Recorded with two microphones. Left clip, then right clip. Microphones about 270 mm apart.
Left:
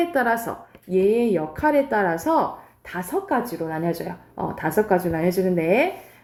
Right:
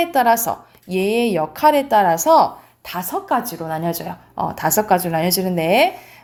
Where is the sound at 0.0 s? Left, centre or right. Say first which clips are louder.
Right 6 dB; right.